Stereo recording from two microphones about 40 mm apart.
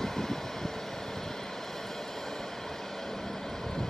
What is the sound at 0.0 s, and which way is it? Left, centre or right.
Vehicle, centre.